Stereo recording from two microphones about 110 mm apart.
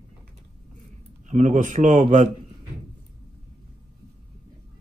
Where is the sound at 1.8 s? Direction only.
80° right.